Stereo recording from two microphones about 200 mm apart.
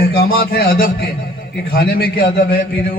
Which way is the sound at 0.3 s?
50° left (ahead or behind).